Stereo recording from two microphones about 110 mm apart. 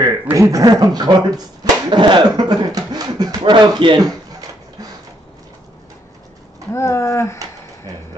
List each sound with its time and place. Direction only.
0.0 s speech: 30° right (ahead or behind)
6.7 s speech: 25° left (ahead or behind)